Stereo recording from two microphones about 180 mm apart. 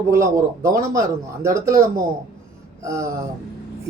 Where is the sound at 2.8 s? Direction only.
15° right (ahead or behind).